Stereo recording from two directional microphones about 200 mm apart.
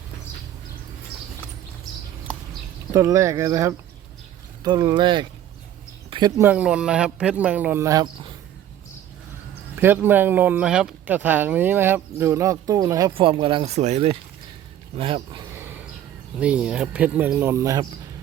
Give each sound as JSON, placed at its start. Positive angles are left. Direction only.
{"t": 2.9, "sound": "speech", "side_deg": -15}
{"t": 6.1, "sound": "a sound", "side_deg": -20}
{"t": 6.4, "sound": "speech", "side_deg": -5}
{"t": 9.7, "sound": "speech", "side_deg": -10}
{"t": 16.4, "sound": "speech", "side_deg": -5}